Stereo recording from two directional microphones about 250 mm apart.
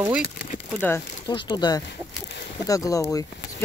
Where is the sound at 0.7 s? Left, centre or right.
Centre.